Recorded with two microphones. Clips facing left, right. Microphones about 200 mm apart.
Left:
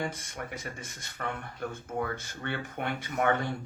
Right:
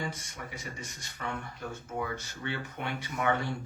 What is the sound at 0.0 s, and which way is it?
Speech, 55° left (ahead or behind).